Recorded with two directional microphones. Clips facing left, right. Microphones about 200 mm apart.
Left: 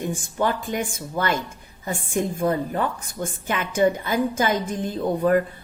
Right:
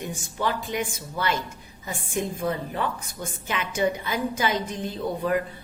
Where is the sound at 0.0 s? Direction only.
50° left (ahead or behind).